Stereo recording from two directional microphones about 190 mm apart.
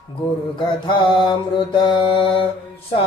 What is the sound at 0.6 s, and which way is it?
Mantra, 25° left (ahead or behind).